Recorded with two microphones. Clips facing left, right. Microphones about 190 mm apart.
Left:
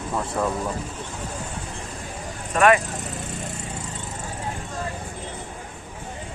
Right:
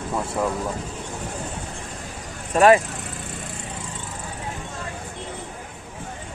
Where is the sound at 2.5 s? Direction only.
30° right (ahead or behind).